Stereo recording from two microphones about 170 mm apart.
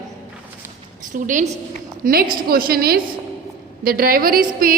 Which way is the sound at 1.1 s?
50° right (ahead or behind).